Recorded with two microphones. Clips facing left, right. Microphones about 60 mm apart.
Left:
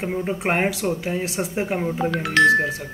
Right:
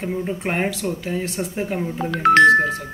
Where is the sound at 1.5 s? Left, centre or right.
Left.